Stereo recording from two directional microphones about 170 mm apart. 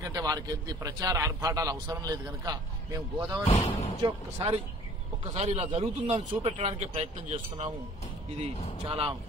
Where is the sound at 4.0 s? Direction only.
30° right (ahead or behind).